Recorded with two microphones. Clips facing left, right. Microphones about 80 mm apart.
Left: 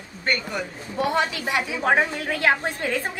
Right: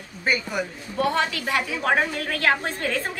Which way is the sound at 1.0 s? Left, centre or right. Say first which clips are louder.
Even; centre.